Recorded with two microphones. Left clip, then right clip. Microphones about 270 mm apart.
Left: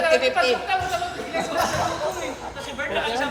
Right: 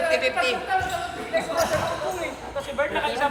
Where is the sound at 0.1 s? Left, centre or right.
Centre.